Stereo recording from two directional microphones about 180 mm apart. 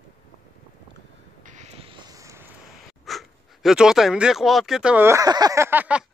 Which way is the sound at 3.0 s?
Centre (ahead or behind).